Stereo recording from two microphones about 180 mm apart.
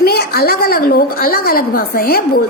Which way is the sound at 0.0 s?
60° left (ahead or behind).